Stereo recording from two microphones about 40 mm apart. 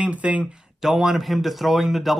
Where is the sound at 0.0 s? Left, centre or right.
Right.